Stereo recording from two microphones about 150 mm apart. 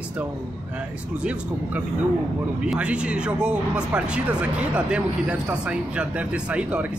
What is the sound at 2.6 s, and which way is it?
Speech, 10° right (ahead or behind).